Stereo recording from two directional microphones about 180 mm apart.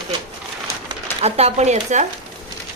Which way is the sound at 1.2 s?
35° right (ahead or behind).